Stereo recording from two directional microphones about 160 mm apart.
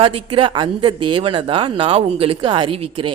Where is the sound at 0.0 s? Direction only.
35° right (ahead or behind).